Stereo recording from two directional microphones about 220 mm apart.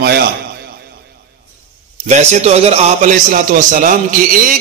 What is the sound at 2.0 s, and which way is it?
A man's voice, 30° right (ahead or behind).